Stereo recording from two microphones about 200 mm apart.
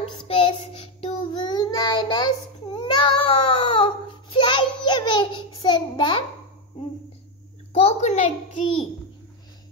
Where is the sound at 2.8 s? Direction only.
25° left (ahead or behind).